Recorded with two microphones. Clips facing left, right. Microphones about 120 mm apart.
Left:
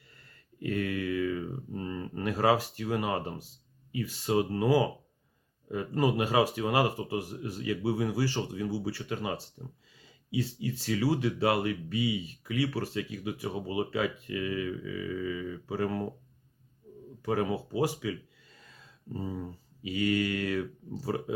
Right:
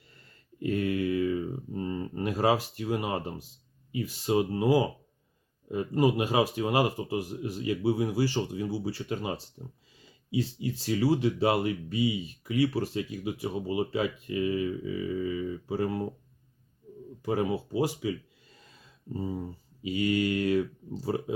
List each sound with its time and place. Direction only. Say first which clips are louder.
0.6 s a sound: right 3 dB; 25° right (ahead or behind)
2.4 s speech: even; 25° right (ahead or behind)
14.8 s a sound: right 3 dB; 30° right (ahead or behind)
15.8 s speech: right 1 dB; 25° right (ahead or behind)
17.3 s speech: right 1 dB; 25° right (ahead or behind)
19.1 s speech: right 2 dB; 25° right (ahead or behind)